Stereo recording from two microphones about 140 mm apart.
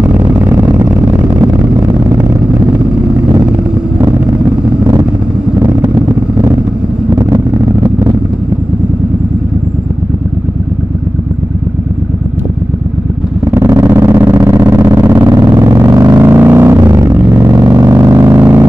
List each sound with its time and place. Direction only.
7.2 s vehicle: 20° right (ahead or behind)
13.5 s vehicle: 20° right (ahead or behind)
16.2 s a sound: 15° right (ahead or behind)
16.7 s vehicle: 25° right (ahead or behind)